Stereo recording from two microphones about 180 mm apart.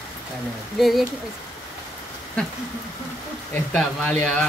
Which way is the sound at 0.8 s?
Centre (ahead or behind).